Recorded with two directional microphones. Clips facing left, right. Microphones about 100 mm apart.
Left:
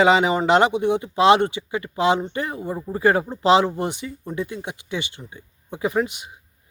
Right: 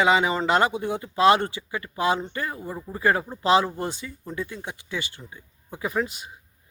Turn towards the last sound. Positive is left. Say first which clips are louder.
# left 5 dB
turn(degrees=20)  # may be behind; listen again after turning